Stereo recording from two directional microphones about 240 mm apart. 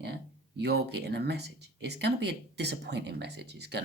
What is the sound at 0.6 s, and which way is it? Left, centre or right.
Speech, right.